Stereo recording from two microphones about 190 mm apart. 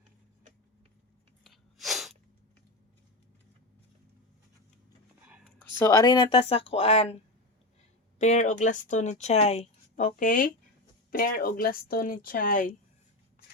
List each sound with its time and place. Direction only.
1.5 s sneeze: centre (ahead or behind)
5.8 s speech: 15° left (ahead or behind)
8.2 s speech: 40° left (ahead or behind)
9.9 s speech: 45° left (ahead or behind)